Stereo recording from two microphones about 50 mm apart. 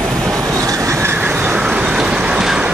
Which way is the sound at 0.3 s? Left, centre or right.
Right.